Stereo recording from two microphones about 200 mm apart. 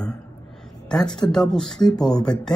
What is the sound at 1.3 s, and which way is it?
Speech, 5° left (ahead or behind).